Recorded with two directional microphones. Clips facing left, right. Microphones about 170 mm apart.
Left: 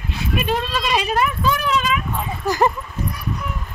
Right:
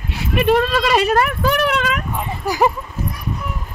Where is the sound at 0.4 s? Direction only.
65° right (ahead or behind).